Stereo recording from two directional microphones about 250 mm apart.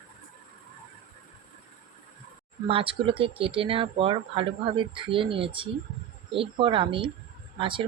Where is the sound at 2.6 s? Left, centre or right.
Right.